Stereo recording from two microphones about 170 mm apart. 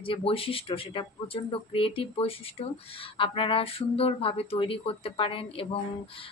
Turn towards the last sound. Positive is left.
turn(degrees=30)  # may be behind; listen again after turning